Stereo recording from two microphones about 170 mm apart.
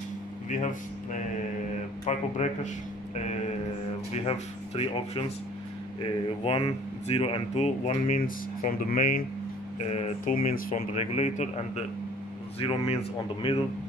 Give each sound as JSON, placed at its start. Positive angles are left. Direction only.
{"t": 0.5, "sound": "speech", "side_deg": 50}
{"t": 4.1, "sound": "speech", "side_deg": 35}
{"t": 8.8, "sound": "speech", "side_deg": 55}
{"t": 9.8, "sound": "speech", "side_deg": 40}
{"t": 10.5, "sound": "speech", "side_deg": 55}
{"t": 11.0, "sound": "speech", "side_deg": 40}